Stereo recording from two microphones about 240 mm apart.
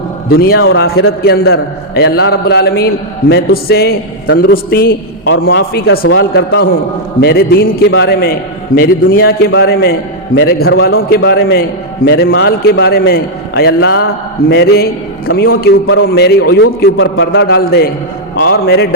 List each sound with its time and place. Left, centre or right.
0.3 s a man's voice: left
0.6 s a man's voice: left
1.2 s a man's voice: left
15.6 s a man's voice: left
16.0 s a man's voice: left